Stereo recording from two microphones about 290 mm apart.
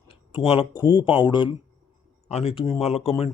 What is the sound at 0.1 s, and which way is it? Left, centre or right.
A man's voice, centre.